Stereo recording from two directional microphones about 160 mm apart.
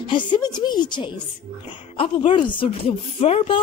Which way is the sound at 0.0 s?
30° left (ahead or behind).